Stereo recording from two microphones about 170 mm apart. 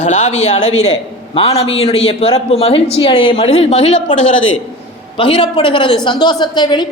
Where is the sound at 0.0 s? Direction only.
45° left (ahead or behind).